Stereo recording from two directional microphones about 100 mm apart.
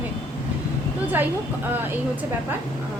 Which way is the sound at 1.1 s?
20° right (ahead or behind).